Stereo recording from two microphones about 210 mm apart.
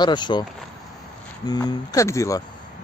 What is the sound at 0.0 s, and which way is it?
Speech, 20° left (ahead or behind).